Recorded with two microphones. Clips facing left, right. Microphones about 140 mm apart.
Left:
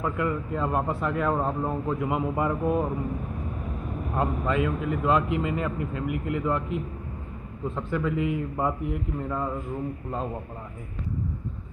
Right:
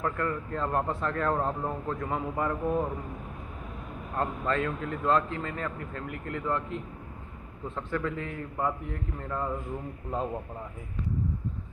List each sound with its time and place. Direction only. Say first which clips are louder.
0.0 s a man's voice: left 3 dB; 10° left (ahead or behind)
4.1 s a man's voice: left 3 dB; 10° left (ahead or behind)